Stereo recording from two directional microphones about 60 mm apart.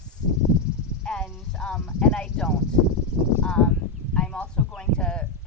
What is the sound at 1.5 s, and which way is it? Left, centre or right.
Speech, centre.